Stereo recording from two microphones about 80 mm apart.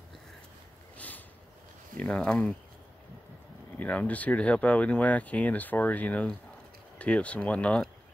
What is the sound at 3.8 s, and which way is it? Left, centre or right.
Speech, centre.